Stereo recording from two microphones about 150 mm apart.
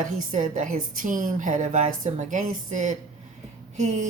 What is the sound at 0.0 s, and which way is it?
A woman's voice, 60° right (ahead or behind).